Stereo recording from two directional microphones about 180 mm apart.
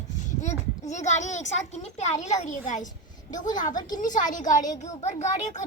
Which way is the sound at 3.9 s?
45° left (ahead or behind).